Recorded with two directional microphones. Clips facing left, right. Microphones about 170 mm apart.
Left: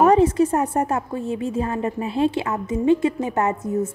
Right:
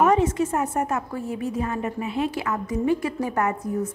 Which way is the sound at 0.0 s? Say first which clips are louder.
Left 4 dB; 35° left (ahead or behind).